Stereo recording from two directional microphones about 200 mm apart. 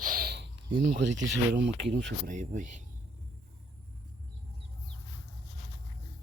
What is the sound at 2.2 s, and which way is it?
Speech, 40° right (ahead or behind).